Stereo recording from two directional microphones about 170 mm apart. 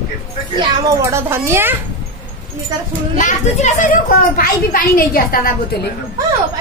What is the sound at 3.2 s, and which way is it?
A child's voice, 45° left (ahead or behind).